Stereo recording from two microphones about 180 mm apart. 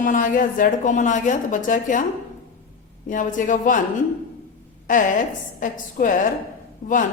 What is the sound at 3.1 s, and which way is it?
Speech, 45° left (ahead or behind).